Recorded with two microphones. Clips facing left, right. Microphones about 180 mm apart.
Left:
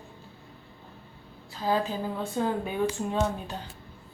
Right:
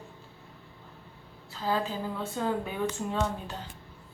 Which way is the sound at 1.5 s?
15° left (ahead or behind).